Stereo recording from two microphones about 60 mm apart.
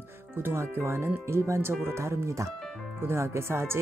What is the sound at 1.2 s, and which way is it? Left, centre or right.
Speech, right.